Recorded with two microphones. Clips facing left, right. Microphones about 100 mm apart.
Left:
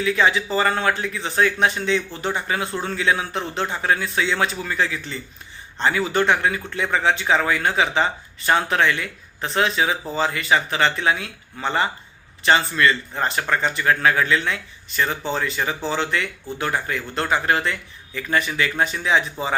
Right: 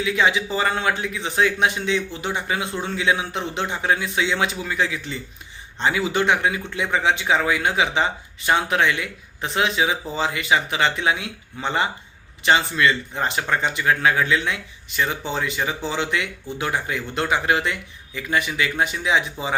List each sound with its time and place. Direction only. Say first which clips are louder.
0.0 s speech: left 1 dB; 15° right (ahead or behind)